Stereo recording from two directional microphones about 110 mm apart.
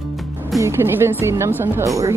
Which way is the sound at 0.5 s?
25° right (ahead or behind).